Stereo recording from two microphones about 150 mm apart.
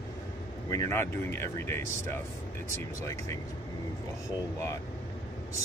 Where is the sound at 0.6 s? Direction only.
20° left (ahead or behind).